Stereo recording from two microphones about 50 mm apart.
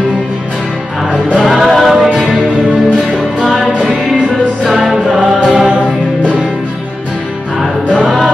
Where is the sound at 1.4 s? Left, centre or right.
Centre.